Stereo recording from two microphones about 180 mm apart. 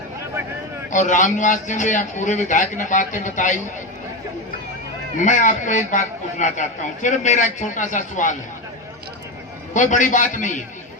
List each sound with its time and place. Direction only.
0.9 s a man's voice: 45° left (ahead or behind)
5.1 s a man's voice: 45° left (ahead or behind)
9.7 s a man's voice: 45° left (ahead or behind)